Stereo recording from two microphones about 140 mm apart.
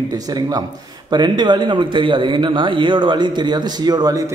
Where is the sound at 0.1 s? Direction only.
30° right (ahead or behind).